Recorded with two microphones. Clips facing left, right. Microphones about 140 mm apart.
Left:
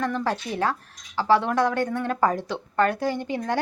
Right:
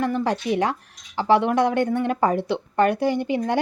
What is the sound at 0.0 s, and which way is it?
Speech, 10° right (ahead or behind).